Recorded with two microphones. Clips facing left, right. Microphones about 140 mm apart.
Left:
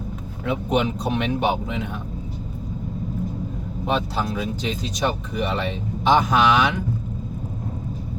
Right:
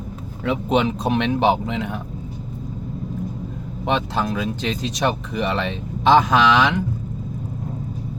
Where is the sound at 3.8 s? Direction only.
75° right (ahead or behind).